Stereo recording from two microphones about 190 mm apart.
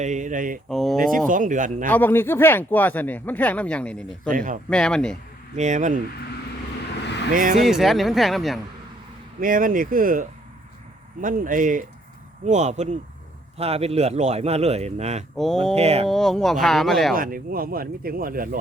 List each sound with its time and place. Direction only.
0.0 s a man's voice: 40° right (ahead or behind)
0.7 s speech: centre (ahead or behind)
0.9 s speech: 45° right (ahead or behind)
1.9 s speech: 10° left (ahead or behind)
4.3 s speech: 45° right (ahead or behind)
4.7 s speech: 5° left (ahead or behind)
5.5 s a man's voice: 40° right (ahead or behind)
7.0 s vehicle: 65° left (ahead or behind)
7.6 s speech: centre (ahead or behind)
9.4 s a man's voice: 45° right (ahead or behind)
15.4 s speech: centre (ahead or behind)
15.7 s a man's voice: 35° right (ahead or behind)
16.0 s speech: centre (ahead or behind)
17.2 s speech: 50° right (ahead or behind)